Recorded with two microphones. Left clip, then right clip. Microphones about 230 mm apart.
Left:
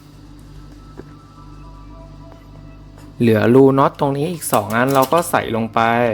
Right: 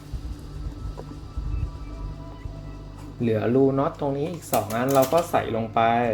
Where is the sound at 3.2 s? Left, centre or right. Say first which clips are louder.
Left 9 dB; left.